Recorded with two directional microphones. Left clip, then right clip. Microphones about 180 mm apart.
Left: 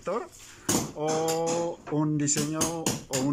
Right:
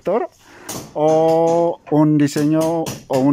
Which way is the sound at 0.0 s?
50° right (ahead or behind).